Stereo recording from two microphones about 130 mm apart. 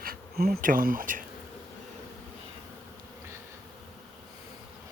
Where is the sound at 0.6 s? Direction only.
90° right.